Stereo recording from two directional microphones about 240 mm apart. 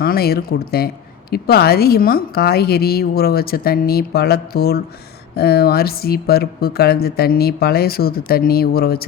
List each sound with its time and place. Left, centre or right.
0.0 s speech: left